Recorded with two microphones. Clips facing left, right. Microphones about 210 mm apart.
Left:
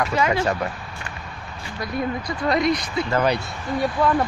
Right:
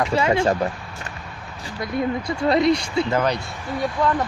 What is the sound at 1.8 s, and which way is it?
Speech, 25° right (ahead or behind).